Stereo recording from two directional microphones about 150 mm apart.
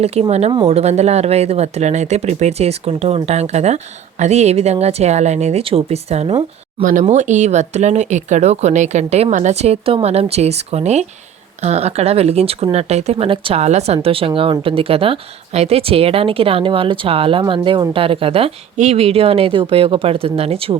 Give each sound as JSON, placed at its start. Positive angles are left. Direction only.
{"t": 0.0, "sound": "speech", "side_deg": -45}